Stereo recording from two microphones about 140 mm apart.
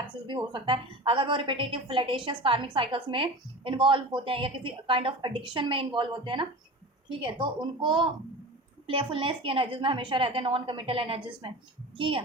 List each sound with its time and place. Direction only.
0.1 s a woman's voice: 35° right (ahead or behind)